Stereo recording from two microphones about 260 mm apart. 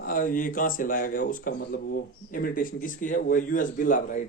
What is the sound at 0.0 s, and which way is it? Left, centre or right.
Speech, left.